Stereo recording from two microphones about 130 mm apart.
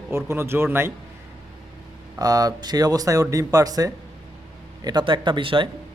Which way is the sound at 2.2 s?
30° right (ahead or behind).